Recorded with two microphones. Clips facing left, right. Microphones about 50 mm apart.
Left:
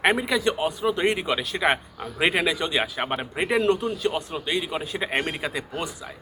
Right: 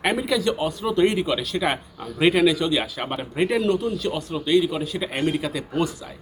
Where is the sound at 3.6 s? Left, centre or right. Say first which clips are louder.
Even; left.